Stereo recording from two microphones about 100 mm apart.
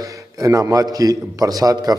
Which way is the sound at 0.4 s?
35° right (ahead or behind).